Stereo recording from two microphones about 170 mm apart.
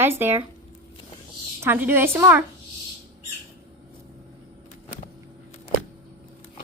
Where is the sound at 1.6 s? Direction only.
15° right (ahead or behind).